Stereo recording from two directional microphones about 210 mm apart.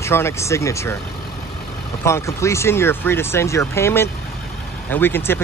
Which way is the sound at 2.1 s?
15° left (ahead or behind).